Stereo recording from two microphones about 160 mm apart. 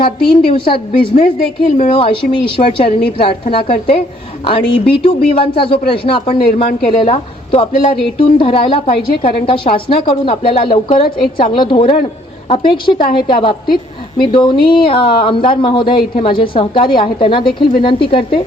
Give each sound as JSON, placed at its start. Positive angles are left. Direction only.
{"t": 0.0, "sound": "speech", "side_deg": 30}